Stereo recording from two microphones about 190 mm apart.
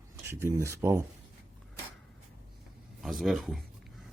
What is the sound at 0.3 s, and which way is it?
Speech, 15° right (ahead or behind).